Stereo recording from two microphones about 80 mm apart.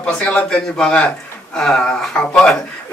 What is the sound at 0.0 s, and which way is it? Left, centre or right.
Speech, centre.